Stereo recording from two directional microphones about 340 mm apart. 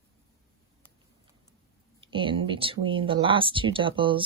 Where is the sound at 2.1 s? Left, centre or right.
Centre.